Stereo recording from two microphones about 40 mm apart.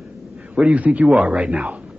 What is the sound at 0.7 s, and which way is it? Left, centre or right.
Speech, right.